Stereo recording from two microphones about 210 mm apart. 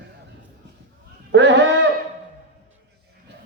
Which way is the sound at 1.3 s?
55° right (ahead or behind).